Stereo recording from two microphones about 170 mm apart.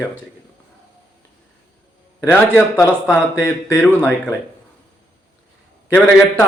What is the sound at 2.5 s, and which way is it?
Speech, 20° left (ahead or behind).